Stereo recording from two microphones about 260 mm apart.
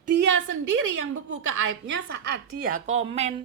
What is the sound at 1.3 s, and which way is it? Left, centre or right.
Speech, right.